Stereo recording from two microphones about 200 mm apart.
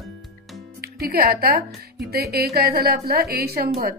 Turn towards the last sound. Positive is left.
turn(degrees=-50)  # may be behind; listen again after turning